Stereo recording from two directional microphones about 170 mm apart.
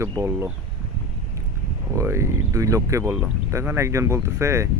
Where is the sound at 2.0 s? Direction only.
15° right (ahead or behind).